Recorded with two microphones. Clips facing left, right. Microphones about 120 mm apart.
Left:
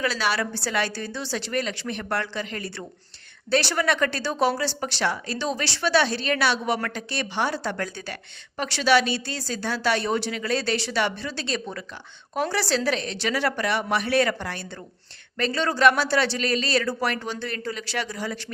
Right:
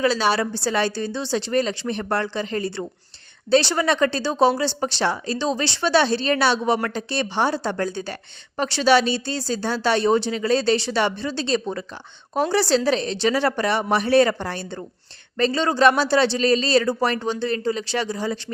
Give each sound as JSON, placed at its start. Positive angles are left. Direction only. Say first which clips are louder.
{"t": 0.0, "sound": "a woman's voice", "louder": "right 5 dB", "side_deg": -25}